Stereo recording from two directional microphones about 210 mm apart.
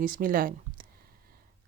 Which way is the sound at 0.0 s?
40° right (ahead or behind).